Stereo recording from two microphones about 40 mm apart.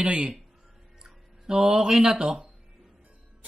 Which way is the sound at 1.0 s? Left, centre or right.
Centre.